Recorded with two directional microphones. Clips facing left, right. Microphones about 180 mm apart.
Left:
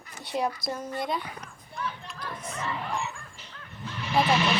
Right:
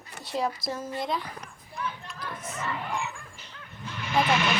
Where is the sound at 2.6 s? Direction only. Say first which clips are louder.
Even; centre (ahead or behind).